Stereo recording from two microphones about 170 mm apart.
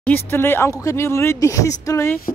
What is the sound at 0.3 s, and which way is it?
Speech, 15° left (ahead or behind).